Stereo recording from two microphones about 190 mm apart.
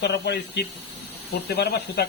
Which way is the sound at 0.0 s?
60° left (ahead or behind).